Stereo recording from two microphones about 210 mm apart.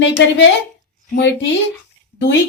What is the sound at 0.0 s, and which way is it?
A woman's voice, 60° left (ahead or behind).